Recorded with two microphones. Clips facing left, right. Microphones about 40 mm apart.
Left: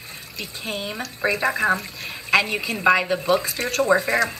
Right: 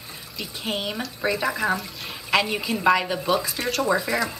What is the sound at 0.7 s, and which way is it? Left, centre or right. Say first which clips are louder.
Speech: right 1 dB; right.